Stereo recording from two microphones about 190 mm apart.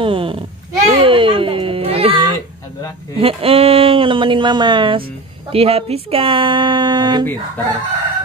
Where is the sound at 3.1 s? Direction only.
30° right (ahead or behind).